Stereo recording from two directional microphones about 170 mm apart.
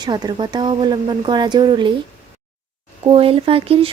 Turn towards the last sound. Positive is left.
turn(degrees=-35)  # may be behind; listen again after turning